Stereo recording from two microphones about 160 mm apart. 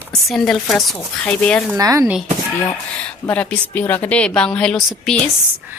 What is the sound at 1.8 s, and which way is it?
Speech, 20° right (ahead or behind).